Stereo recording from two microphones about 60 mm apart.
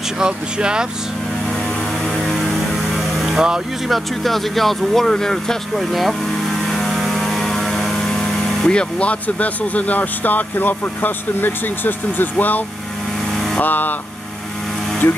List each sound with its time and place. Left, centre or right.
0.2 s speech: centre
2.1 s vehicle: centre
3.9 s speech: centre
5.9 s vehicle: centre
8.6 s speech: centre; by 12.6 s left
13.3 s vehicle: centre
13.6 s speech: left
15.0 s speech: left